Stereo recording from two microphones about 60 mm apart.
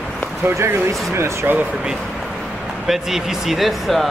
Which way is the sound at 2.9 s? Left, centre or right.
Centre.